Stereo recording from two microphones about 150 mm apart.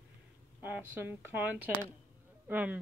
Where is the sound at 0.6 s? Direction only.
10° right (ahead or behind).